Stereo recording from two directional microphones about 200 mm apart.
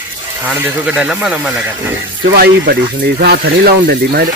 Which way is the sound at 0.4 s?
10° right (ahead or behind).